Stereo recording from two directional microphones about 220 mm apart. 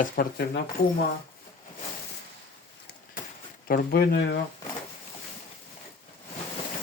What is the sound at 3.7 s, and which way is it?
Speech, 45° left (ahead or behind).